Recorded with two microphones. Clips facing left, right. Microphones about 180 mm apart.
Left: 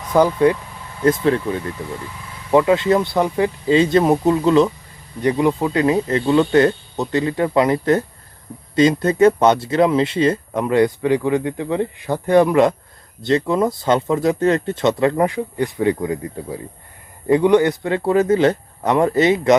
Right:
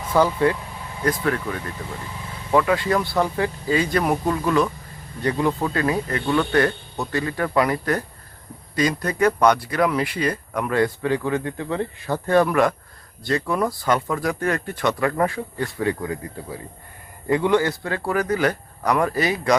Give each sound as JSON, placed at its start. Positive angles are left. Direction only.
{"t": 0.1, "sound": "speech", "side_deg": 15}